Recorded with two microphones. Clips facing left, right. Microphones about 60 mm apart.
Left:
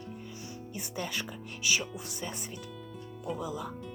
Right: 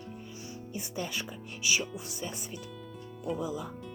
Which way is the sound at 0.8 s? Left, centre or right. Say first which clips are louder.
Even; left.